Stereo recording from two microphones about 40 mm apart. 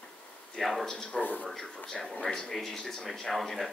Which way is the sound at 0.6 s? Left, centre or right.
Centre.